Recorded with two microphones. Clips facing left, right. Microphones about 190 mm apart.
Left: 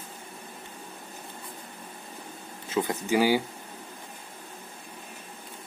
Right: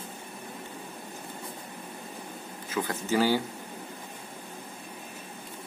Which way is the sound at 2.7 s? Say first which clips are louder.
Left 3 dB; 20° left (ahead or behind).